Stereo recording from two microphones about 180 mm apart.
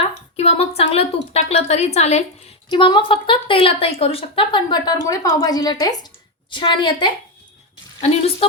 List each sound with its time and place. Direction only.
0.0 s a woman's voice: 35° left (ahead or behind)